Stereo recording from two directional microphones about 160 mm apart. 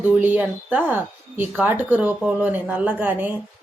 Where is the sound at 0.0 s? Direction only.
10° right (ahead or behind).